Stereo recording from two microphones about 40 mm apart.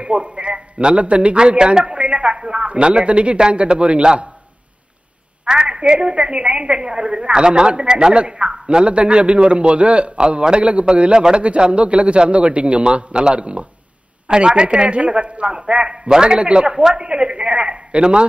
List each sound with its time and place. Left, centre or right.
0.0 s a man's voice: right
5.4 s a woman's voice: right
10.1 s a woman's voice: right
10.6 s a man's voice: right
11.0 s a woman's voice: right